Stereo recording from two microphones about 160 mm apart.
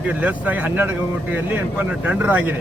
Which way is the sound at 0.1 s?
10° right (ahead or behind).